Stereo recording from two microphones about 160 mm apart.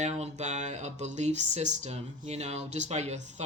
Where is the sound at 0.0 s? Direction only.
45° right (ahead or behind).